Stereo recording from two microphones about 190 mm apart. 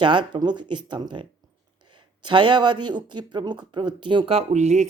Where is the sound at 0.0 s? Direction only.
25° right (ahead or behind).